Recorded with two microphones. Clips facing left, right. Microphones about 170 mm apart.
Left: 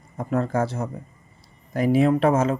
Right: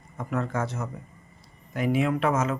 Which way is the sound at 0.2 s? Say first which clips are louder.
Left 6 dB; 35° left (ahead or behind).